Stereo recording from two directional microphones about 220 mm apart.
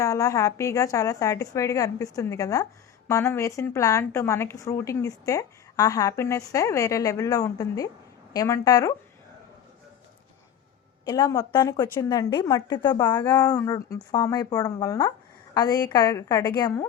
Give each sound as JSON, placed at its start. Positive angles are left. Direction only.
{"t": 0.0, "sound": "a woman's voice", "side_deg": 15}
{"t": 11.0, "sound": "a woman's voice", "side_deg": 15}